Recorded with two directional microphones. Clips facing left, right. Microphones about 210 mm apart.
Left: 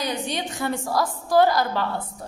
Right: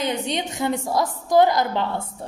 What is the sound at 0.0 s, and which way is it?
A woman's voice, 20° right (ahead or behind).